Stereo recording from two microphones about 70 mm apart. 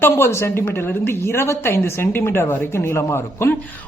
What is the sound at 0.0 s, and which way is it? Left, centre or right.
A man's voice, left.